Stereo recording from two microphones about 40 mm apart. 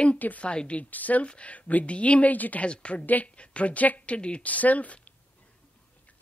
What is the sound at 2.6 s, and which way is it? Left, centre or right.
Speech, left.